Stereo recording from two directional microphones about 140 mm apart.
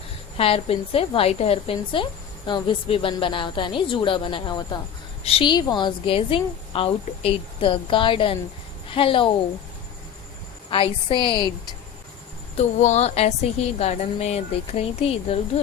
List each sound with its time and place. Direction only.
0.3 s a woman's voice: 40° left (ahead or behind)
10.7 s a woman's voice: 40° left (ahead or behind)
12.5 s a woman's voice: 55° left (ahead or behind)